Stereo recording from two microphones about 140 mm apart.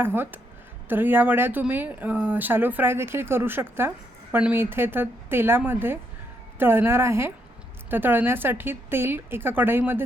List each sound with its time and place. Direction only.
0.0 s speech: 15° right (ahead or behind)